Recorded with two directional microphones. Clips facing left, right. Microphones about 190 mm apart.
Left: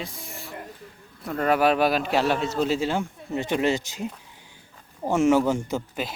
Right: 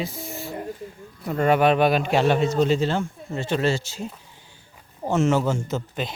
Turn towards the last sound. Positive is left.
turn(degrees=10)  # may be behind; listen again after turning